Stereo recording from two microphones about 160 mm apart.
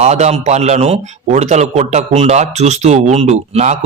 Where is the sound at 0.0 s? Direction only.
45° right (ahead or behind).